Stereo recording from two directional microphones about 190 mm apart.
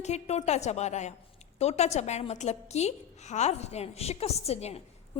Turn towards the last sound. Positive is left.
turn(degrees=35)  # may be behind; listen again after turning